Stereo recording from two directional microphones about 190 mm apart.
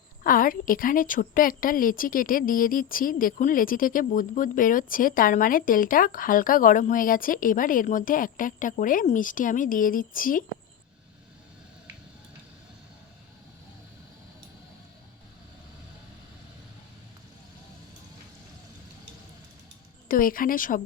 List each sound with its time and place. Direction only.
0.2 s a woman's voice: 45° left (ahead or behind)
20.1 s a woman's voice: 50° left (ahead or behind)